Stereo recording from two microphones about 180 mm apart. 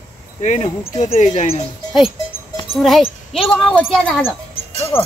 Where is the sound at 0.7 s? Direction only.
30° left (ahead or behind).